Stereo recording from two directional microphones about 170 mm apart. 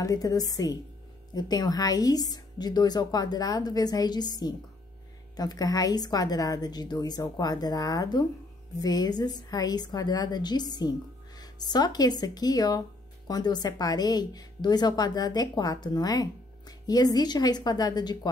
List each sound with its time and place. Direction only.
0.0 s a woman's voice: 20° left (ahead or behind)